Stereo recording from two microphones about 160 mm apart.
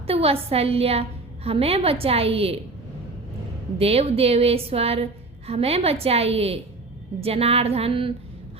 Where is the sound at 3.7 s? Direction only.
40° right (ahead or behind).